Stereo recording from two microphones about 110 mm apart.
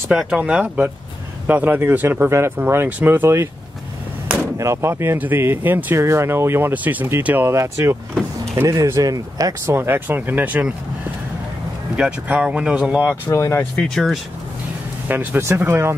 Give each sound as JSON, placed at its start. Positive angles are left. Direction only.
{"t": 0.1, "sound": "speech", "side_deg": -5}
{"t": 4.6, "sound": "speech", "side_deg": -25}
{"t": 9.8, "sound": "speech", "side_deg": -20}
{"t": 12.0, "sound": "speech", "side_deg": -10}
{"t": 13.3, "sound": "speech", "side_deg": 30}
{"t": 13.6, "sound": "speech", "side_deg": 10}
{"t": 15.0, "sound": "speech", "side_deg": -20}